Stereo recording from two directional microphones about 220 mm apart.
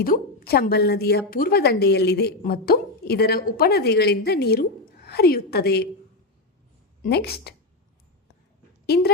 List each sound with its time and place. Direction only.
0.0 s a woman's voice: 40° left (ahead or behind)
7.0 s a woman's voice: 45° left (ahead or behind)